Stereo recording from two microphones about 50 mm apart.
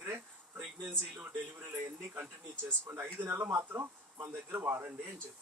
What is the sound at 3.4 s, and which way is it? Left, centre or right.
Speech, right.